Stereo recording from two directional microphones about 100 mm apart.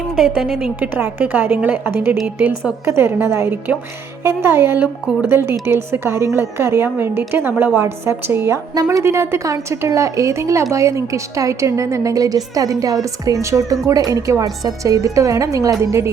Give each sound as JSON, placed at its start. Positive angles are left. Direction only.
{"t": 0.2, "sound": "a woman's voice", "side_deg": 0}
{"t": 0.8, "sound": "a woman's voice", "side_deg": -15}
{"t": 8.7, "sound": "a woman's voice", "side_deg": -35}